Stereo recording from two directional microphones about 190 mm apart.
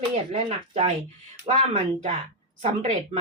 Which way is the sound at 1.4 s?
35° right (ahead or behind).